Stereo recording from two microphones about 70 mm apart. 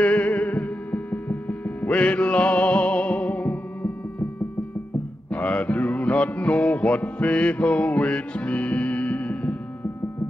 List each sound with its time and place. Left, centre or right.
0.0 s music: centre
5.3 s a sound: centre
5.9 s music: centre